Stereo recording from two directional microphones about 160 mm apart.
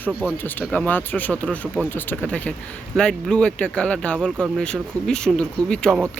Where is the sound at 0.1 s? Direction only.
10° right (ahead or behind).